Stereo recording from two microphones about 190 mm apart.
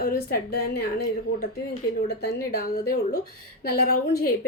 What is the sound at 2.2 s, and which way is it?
A woman's voice, 50° left (ahead or behind).